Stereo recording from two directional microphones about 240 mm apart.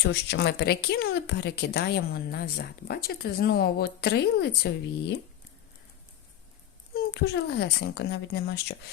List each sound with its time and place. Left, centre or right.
0.0 s speech: left
6.9 s speech: left